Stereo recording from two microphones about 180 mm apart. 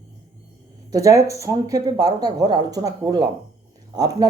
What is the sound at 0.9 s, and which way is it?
Speech, 20° right (ahead or behind).